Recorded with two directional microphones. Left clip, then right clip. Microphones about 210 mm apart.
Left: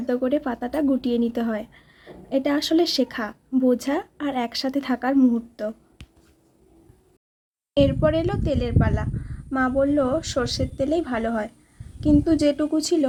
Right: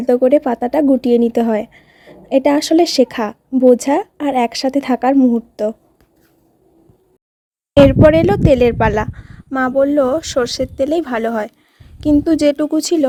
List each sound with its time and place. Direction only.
0.0 s a woman's voice: 30° right (ahead or behind)
7.8 s a woman's voice: 35° right (ahead or behind)